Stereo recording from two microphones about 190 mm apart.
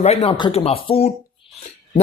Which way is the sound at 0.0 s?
35° left (ahead or behind).